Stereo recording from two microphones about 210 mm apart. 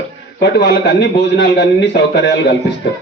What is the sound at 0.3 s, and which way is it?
A man's voice, 50° left (ahead or behind).